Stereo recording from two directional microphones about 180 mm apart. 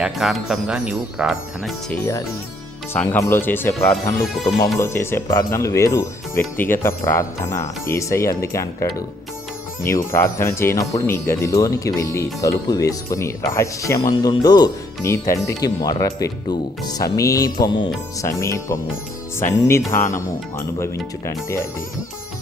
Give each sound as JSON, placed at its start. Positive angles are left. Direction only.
{"t": 0.0, "sound": "speech", "side_deg": 0}
{"t": 1.9, "sound": "speech", "side_deg": 15}
{"t": 19.9, "sound": "speech", "side_deg": 15}